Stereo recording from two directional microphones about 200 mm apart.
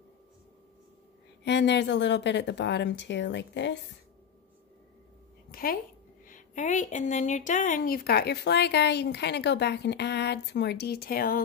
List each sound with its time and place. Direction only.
1.4 s a woman's voice: 60° left (ahead or behind)
5.5 s a sound: 45° left (ahead or behind)
6.2 s a woman's voice: 40° left (ahead or behind)